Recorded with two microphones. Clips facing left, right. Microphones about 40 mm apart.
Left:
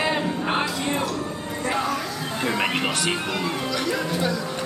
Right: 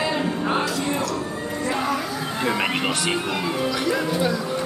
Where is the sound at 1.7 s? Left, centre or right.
Centre.